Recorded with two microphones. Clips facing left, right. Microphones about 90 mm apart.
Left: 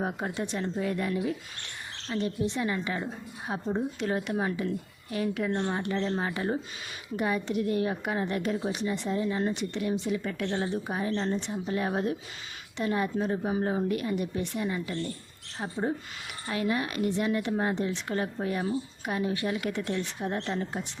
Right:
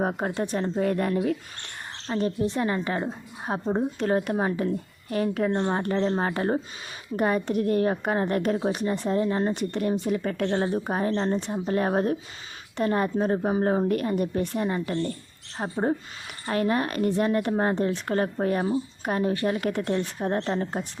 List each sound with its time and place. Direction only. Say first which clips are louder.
0.0 s a woman's voice: right 5 dB; 45° right (ahead or behind)
2.0 s a woman's voice: right 4 dB; 40° right (ahead or behind)